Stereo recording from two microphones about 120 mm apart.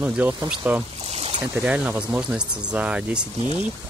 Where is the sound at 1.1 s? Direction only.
60° right (ahead or behind).